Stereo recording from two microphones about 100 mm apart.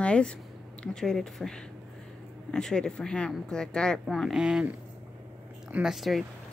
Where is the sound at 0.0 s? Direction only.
10° left (ahead or behind).